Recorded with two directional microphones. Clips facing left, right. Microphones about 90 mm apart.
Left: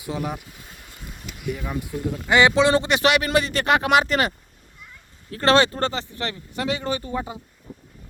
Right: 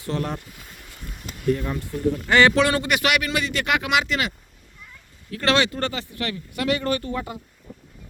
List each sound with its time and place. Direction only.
0.0 s a man's voice: 10° left (ahead or behind)